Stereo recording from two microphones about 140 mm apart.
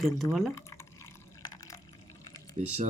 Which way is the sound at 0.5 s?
20° left (ahead or behind).